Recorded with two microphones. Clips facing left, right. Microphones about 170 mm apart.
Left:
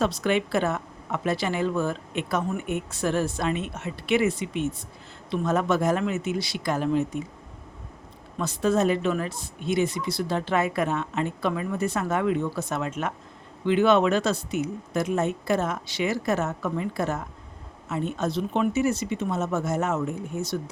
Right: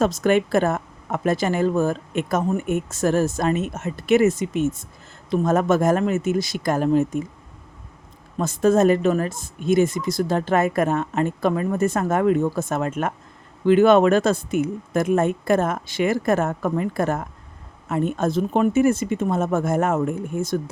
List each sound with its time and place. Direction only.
0.0 s a woman's voice: 45° right (ahead or behind)
8.4 s a woman's voice: 45° right (ahead or behind)